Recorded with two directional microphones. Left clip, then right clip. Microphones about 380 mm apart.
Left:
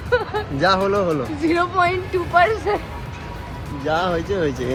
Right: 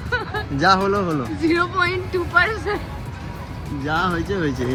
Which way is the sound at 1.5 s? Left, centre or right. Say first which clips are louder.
Left 3 dB; centre.